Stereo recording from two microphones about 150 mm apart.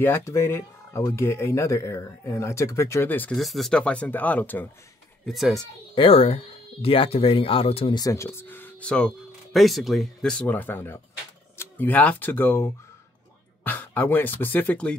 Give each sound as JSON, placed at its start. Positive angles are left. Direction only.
{"t": 0.0, "sound": "speech", "side_deg": 15}
{"t": 3.3, "sound": "speech", "side_deg": 0}
{"t": 5.2, "sound": "a child's voice", "side_deg": 0}
{"t": 5.9, "sound": "speech", "side_deg": 40}
{"t": 7.9, "sound": "speech", "side_deg": 20}